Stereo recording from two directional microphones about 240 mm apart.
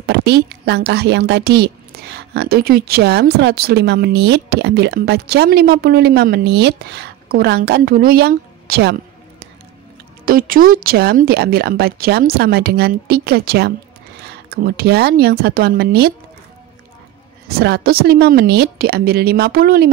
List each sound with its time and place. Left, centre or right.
0.0 s a woman's voice: right
10.2 s speech: right
17.5 s speech: right